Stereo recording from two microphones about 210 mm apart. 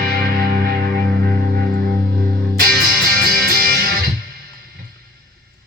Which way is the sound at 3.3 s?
45° right (ahead or behind).